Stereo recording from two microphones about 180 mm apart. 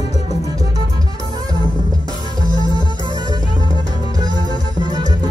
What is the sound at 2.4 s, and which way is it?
Music, 25° left (ahead or behind).